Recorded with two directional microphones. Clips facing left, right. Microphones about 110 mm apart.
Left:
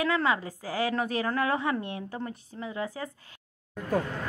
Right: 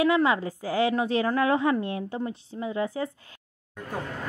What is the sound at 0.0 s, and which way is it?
A woman's voice, 20° right (ahead or behind).